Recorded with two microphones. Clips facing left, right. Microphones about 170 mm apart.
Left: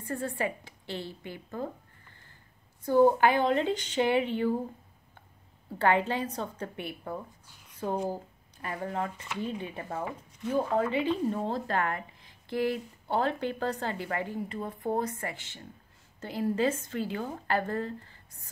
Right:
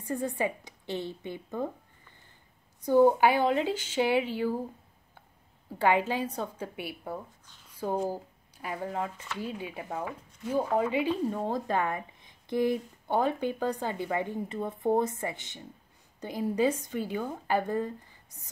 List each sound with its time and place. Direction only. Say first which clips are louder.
0.0 s a woman's voice: right 2 dB; 15° right (ahead or behind)
2.8 s speech: right 1 dB; 15° right (ahead or behind)
5.8 s speech: even; 10° right (ahead or behind)